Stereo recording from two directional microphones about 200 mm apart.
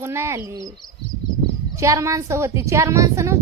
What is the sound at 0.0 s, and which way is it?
Speech, 10° right (ahead or behind).